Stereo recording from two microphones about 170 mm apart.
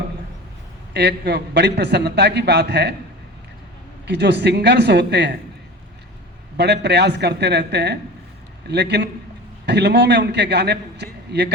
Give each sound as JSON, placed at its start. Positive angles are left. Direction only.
{"t": 0.9, "sound": "a man's voice", "side_deg": -80}
{"t": 4.0, "sound": "speech", "side_deg": -90}
{"t": 6.6, "sound": "a man's voice", "side_deg": -80}